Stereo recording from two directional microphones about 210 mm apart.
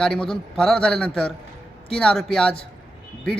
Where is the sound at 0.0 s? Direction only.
5° left (ahead or behind).